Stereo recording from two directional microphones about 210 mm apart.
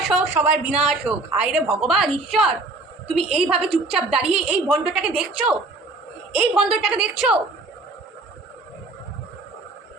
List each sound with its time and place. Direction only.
0.1 s speech: 5° right (ahead or behind)
4.2 s a woman's voice: 30° right (ahead or behind)
4.4 s speech: 5° right (ahead or behind)